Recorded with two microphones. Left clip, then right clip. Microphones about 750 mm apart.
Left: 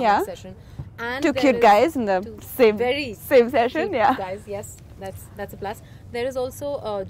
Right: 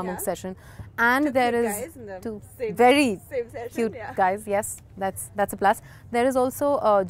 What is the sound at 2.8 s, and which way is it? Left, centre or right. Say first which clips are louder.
Speech: right 6 dB; right.